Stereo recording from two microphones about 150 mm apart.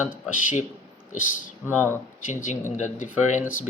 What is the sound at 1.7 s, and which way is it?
Speech, 15° left (ahead or behind).